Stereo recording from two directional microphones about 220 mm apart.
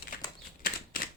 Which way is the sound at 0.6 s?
40° left (ahead or behind).